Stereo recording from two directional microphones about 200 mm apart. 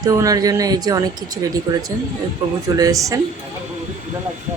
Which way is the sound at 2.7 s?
15° right (ahead or behind).